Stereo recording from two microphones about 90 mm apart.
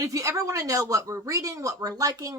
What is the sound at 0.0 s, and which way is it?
Speech, 40° right (ahead or behind).